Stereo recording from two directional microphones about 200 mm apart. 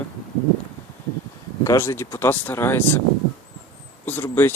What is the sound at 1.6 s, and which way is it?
Speech, 15° left (ahead or behind).